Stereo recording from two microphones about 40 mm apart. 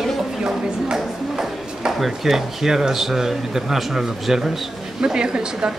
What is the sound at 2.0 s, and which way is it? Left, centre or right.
Speech, centre.